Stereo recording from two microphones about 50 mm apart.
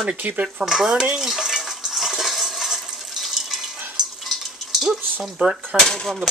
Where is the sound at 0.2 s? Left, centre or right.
Right.